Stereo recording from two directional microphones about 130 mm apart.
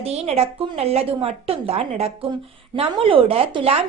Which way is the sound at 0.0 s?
55° right (ahead or behind).